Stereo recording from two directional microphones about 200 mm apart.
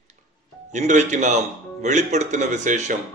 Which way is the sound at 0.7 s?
35° right (ahead or behind).